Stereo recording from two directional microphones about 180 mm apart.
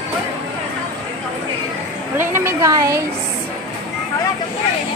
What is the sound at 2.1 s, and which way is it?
Speech, 15° right (ahead or behind).